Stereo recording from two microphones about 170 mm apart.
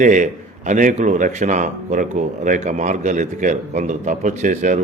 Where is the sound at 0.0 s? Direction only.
50° right (ahead or behind).